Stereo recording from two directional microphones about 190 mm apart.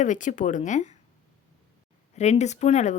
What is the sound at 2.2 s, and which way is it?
Speech, 35° left (ahead or behind).